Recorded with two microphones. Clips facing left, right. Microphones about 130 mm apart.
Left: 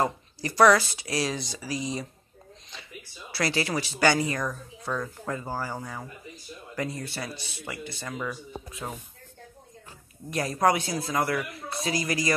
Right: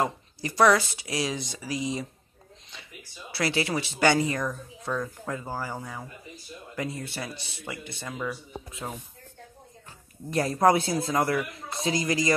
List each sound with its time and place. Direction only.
0.0 s speech: 15° right (ahead or behind)
3.3 s speech: 20° right (ahead or behind)
4.4 s speech: centre (ahead or behind)
6.7 s speech: 15° right (ahead or behind)
8.1 s speech: 10° right (ahead or behind)
10.3 s speech: 30° right (ahead or behind)